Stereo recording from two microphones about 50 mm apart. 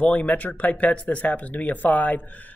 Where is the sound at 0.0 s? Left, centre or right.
Left.